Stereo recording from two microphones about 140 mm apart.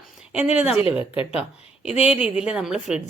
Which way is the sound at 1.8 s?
10° right (ahead or behind).